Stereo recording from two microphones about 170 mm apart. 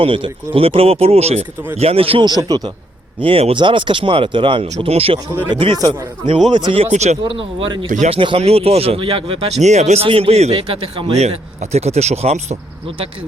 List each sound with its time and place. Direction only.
0.0 s speech: 30° right (ahead or behind)
3.2 s speech: 35° right (ahead or behind)
6.9 s speech: 40° right (ahead or behind)
7.9 s speech: 45° right (ahead or behind)
8.2 s speech: 35° right (ahead or behind)